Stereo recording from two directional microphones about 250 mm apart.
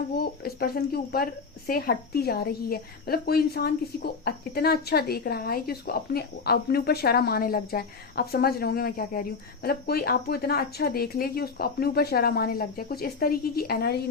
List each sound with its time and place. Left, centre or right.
0.4 s speech: left